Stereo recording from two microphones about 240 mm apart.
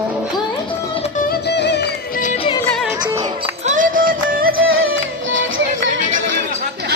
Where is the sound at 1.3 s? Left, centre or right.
Left.